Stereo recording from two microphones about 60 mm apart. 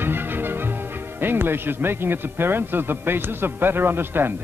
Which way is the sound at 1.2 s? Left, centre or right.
Right.